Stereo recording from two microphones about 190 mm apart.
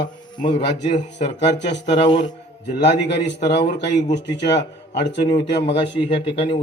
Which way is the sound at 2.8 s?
65° left (ahead or behind).